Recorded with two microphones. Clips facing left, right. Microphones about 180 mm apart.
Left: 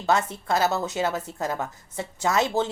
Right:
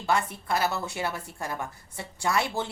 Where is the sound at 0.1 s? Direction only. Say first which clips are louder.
Left 4 dB; 25° left (ahead or behind).